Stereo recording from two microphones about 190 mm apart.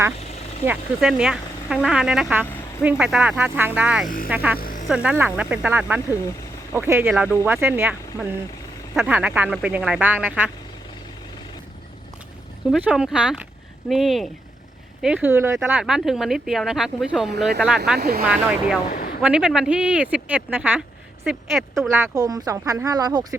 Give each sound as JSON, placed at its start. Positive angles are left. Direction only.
{"t": 0.6, "sound": "speech", "side_deg": -5}
{"t": 4.5, "sound": "a sound", "side_deg": 50}
{"t": 4.9, "sound": "speech", "side_deg": -5}
{"t": 12.7, "sound": "speech", "side_deg": -5}
{"t": 15.7, "sound": "speech", "side_deg": -5}
{"t": 17.9, "sound": "speech", "side_deg": -55}
{"t": 18.9, "sound": "a sound", "side_deg": 50}
{"t": 19.2, "sound": "speech", "side_deg": -5}
{"t": 21.8, "sound": "speech", "side_deg": -10}